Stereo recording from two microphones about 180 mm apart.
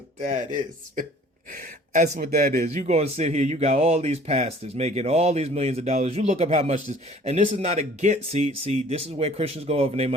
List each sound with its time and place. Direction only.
0.3 s speech: 45° right (ahead or behind)